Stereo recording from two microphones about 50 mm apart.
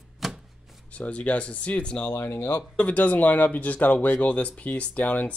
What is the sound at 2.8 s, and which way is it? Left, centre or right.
Speech, left.